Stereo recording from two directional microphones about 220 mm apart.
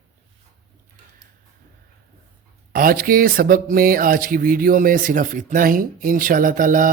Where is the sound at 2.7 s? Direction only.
40° right (ahead or behind).